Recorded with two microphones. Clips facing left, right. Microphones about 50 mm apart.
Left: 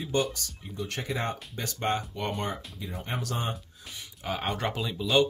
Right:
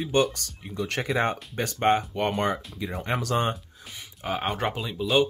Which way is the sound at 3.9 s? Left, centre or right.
Centre.